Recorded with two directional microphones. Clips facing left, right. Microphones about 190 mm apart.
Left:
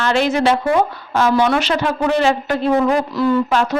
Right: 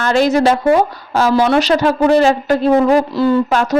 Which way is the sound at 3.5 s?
45° right (ahead or behind).